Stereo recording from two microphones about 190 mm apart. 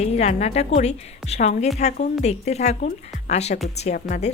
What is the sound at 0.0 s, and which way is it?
A woman's voice, 35° left (ahead or behind).